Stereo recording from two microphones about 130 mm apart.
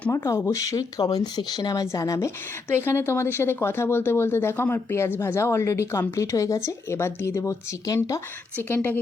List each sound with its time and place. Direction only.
0.1 s speech: 20° left (ahead or behind)